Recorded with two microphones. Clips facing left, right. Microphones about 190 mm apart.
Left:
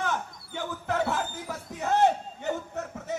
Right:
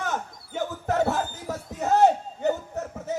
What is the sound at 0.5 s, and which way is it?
Crowd, 45° right (ahead or behind).